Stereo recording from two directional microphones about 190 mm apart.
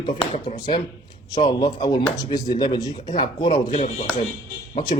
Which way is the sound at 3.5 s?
40° left (ahead or behind).